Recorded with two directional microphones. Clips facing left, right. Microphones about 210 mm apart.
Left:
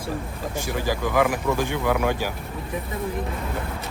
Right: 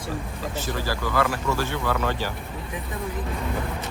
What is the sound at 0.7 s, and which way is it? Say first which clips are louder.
Speech: left 4 dB; 15° left (ahead or behind).